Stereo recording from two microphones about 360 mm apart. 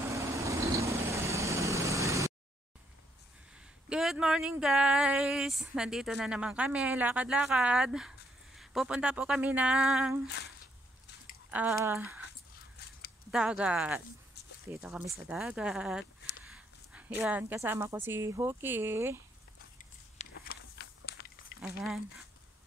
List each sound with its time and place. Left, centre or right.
0.0 s vehicle: centre
3.9 s speech: centre
10.2 s speech: left
11.5 s speech: centre
13.3 s speech: centre
16.4 s a sound: centre
17.2 s speech: centre
20.3 s walk: left
21.5 s speech: centre